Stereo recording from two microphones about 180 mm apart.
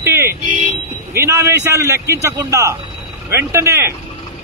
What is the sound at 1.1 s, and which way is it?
Speech, 15° right (ahead or behind).